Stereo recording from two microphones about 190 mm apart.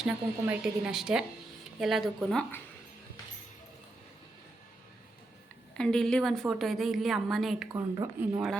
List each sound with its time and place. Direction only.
0.0 s a woman's voice: 5° right (ahead or behind)
5.7 s a woman's voice: 5° left (ahead or behind)
7.7 s a woman's voice: 20° right (ahead or behind)